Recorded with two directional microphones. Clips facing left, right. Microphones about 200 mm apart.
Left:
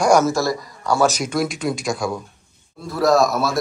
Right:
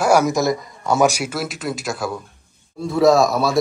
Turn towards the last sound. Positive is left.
turn(degrees=0)  # may be behind; listen again after turning